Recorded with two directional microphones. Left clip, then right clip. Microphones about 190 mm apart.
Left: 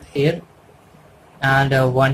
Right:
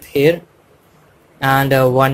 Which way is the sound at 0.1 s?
35° right (ahead or behind).